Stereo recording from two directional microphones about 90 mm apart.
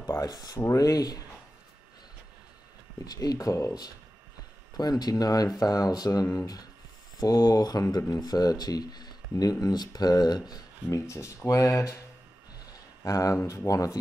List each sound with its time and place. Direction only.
0.0 s speech: 40° left (ahead or behind)
3.1 s speech: 45° left (ahead or behind)
11.0 s speech: 35° left (ahead or behind)
13.0 s speech: 40° left (ahead or behind)